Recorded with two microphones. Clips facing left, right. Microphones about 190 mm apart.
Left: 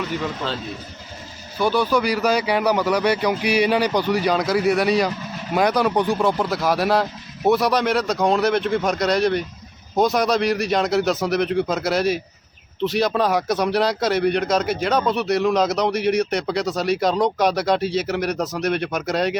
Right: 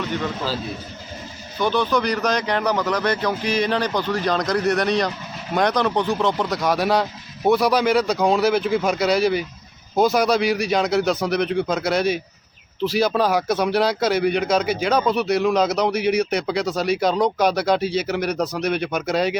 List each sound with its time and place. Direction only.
1.5 s speech: 10° left (ahead or behind)